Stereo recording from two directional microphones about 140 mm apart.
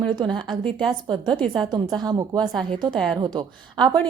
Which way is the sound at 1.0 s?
35° right (ahead or behind).